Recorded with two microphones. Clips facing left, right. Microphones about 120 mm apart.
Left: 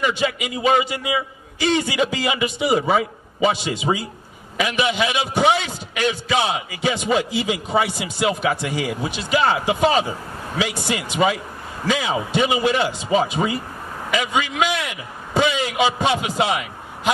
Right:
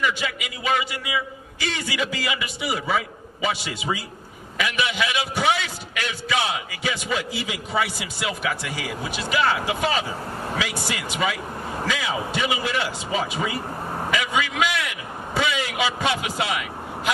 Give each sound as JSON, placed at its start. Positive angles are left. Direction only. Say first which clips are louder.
{"t": 0.0, "sound": "a man's voice", "louder": "left 4 dB", "side_deg": 25}